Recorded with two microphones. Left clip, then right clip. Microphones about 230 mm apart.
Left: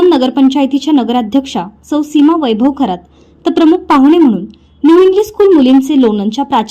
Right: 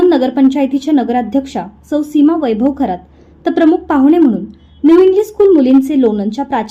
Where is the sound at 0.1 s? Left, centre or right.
Left.